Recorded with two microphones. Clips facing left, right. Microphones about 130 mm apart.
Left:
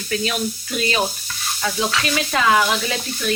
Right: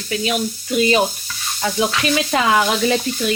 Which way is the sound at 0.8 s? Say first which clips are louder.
Right 6 dB; 20° right (ahead or behind).